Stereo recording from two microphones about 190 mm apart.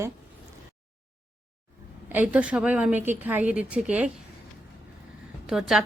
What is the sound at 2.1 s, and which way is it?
A woman's voice, 5° right (ahead or behind).